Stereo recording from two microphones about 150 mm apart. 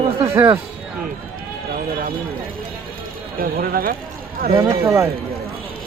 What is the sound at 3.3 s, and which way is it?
Speech, 75° right (ahead or behind).